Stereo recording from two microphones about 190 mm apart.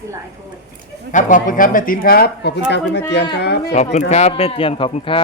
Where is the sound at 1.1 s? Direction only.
40° left (ahead or behind); by 3.7 s 60° left (ahead or behind).